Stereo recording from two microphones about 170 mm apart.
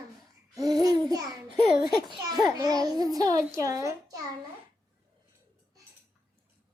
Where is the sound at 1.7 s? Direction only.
Centre (ahead or behind).